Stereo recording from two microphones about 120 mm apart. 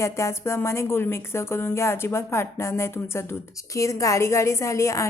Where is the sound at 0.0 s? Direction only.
25° left (ahead or behind).